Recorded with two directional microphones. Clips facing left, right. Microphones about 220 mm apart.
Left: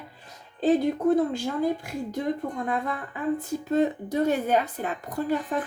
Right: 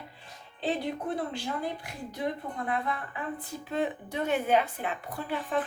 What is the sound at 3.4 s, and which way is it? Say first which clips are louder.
A woman's voice: left 7 dB; 40° left (ahead or behind).